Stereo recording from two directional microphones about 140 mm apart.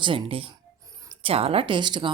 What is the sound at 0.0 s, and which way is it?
Speech, 40° right (ahead or behind).